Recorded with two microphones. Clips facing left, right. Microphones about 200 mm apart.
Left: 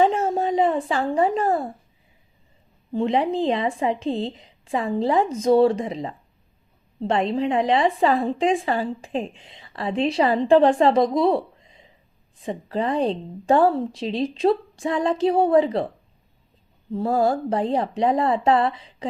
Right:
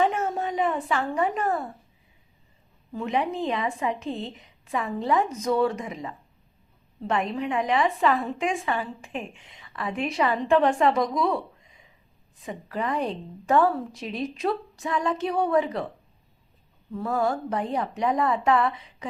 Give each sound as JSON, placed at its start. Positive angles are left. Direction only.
{"t": 0.0, "sound": "a sound", "side_deg": 30}
{"t": 2.9, "sound": "a woman's voice", "side_deg": 30}
{"t": 16.9, "sound": "a woman's voice", "side_deg": 30}